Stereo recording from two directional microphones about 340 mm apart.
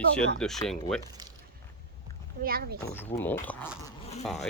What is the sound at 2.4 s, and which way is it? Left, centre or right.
Speech, right.